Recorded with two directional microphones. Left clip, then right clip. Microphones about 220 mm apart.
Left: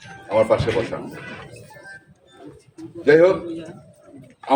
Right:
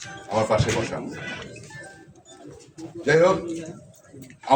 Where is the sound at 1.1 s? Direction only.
25° right (ahead or behind).